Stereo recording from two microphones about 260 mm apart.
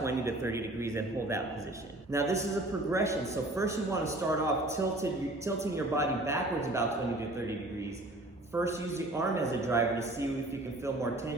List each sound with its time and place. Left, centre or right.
0.0 s a man's voice: centre
8.6 s a man's voice: centre